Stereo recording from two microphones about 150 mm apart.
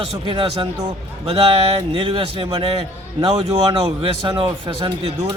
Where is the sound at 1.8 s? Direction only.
40° right (ahead or behind).